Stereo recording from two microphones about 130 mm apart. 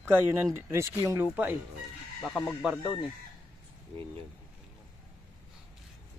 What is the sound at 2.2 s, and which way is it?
Speech, 10° left (ahead or behind).